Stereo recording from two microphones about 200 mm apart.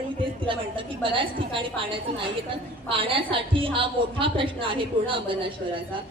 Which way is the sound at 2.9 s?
25° right (ahead or behind).